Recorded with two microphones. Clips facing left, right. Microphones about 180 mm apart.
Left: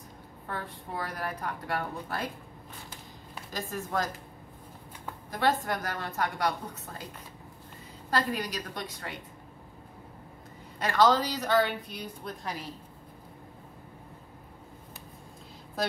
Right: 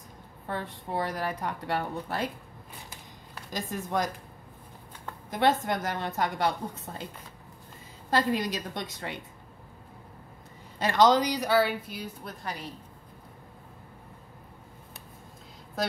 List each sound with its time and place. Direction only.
0.5 s a woman's voice: 25° right (ahead or behind)
3.5 s a woman's voice: 20° right (ahead or behind)
5.3 s a woman's voice: 20° right (ahead or behind)
8.1 s a woman's voice: 25° right (ahead or behind)
10.8 s a woman's voice: 20° right (ahead or behind); by 12.7 s centre (ahead or behind)